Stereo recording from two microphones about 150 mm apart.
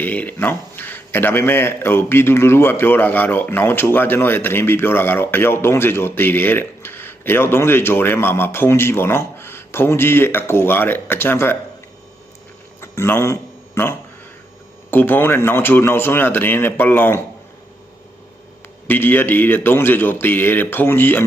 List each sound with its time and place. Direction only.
0.0 s a man's voice: 10° left (ahead or behind)
12.8 s a sound: 15° left (ahead or behind)
14.8 s a man's voice: 15° left (ahead or behind)
18.9 s a man's voice: 15° left (ahead or behind)